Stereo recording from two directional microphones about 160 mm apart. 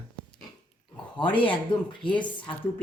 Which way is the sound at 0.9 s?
30° left (ahead or behind).